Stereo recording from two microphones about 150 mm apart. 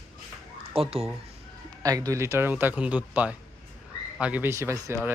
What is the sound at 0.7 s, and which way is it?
Speech, 40° right (ahead or behind).